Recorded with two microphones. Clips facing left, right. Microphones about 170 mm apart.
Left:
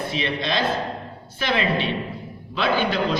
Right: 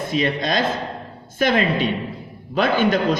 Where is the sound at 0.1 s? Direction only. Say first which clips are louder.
Right 7 dB; 45° right (ahead or behind).